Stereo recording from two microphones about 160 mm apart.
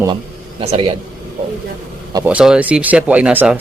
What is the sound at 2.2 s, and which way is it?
Speech, 5° right (ahead or behind).